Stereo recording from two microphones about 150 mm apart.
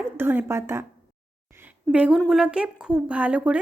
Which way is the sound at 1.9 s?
5° right (ahead or behind).